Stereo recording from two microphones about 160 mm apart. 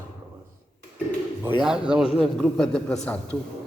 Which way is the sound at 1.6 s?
5° right (ahead or behind).